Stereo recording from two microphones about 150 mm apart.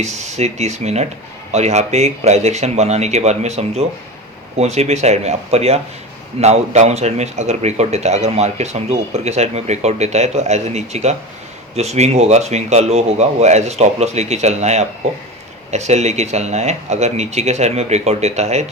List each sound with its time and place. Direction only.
0.0 s speech: 50° right (ahead or behind)